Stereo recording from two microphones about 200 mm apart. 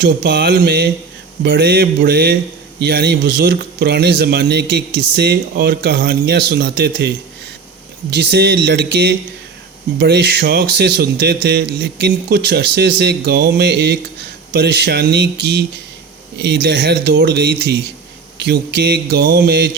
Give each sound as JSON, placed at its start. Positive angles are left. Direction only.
{"t": 0.0, "sound": "speech", "side_deg": -50}
{"t": 2.8, "sound": "music", "side_deg": -55}
{"t": 8.1, "sound": "music", "side_deg": -55}
{"t": 18.3, "sound": "speech", "side_deg": -55}